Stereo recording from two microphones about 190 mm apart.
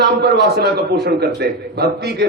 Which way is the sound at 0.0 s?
60° right (ahead or behind).